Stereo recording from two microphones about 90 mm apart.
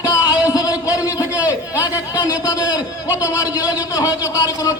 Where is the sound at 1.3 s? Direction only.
20° right (ahead or behind).